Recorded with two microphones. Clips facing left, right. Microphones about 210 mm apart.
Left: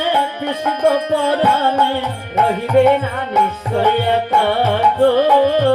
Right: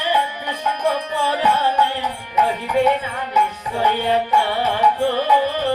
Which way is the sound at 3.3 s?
55° left (ahead or behind).